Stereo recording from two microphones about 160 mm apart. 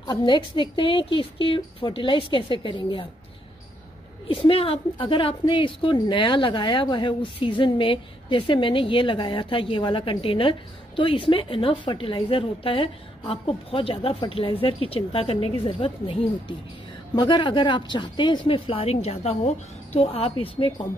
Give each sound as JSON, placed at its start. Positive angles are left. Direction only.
{"t": 0.0, "sound": "a woman's voice", "side_deg": 30}
{"t": 4.3, "sound": "a woman's voice", "side_deg": 35}